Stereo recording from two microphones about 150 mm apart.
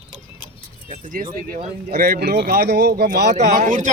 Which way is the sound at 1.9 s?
80° right.